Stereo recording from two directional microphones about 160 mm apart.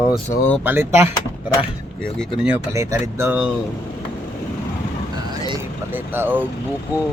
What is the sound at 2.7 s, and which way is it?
Speech, 20° right (ahead or behind).